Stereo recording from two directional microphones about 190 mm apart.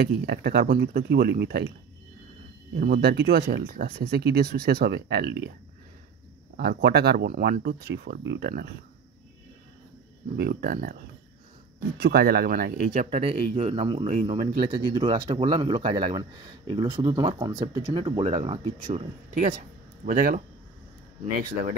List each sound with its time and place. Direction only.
0.0 s speech: 55° right (ahead or behind)
2.8 s speech: 55° right (ahead or behind)
6.5 s speech: 60° right (ahead or behind)
10.3 s speech: 60° right (ahead or behind)
12.0 s a man's voice: 55° right (ahead or behind); by 19.0 s 25° right (ahead or behind)
20.1 s speech: 50° right (ahead or behind)